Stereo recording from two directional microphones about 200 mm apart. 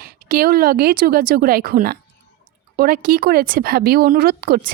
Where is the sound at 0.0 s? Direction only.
50° right (ahead or behind).